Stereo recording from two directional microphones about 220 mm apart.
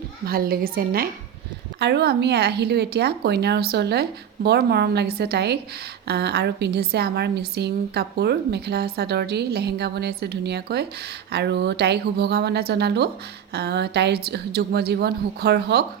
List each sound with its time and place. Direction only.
0.3 s a woman's voice: 40° right (ahead or behind)